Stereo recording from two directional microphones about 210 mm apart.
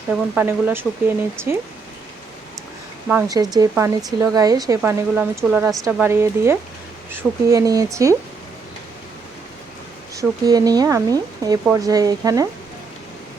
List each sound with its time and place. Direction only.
0.3 s speech: 10° right (ahead or behind)
3.1 s speech: 15° right (ahead or behind)
10.2 s speech: 20° right (ahead or behind)